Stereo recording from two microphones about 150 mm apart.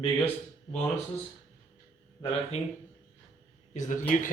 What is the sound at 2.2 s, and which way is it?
Speech, 15° left (ahead or behind).